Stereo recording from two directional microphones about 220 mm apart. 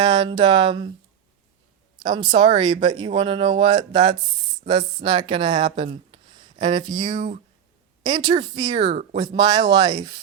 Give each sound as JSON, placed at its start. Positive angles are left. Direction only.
{"t": 0.0, "sound": "speech", "side_deg": -20}
{"t": 2.0, "sound": "speech", "side_deg": -20}